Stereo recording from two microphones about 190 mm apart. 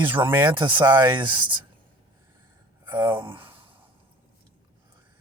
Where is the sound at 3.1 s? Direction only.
25° right (ahead or behind).